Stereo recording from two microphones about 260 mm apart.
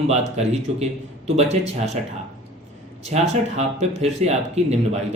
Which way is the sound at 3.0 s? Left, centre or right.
Right.